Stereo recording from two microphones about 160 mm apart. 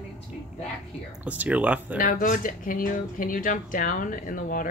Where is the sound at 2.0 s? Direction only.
60° left (ahead or behind).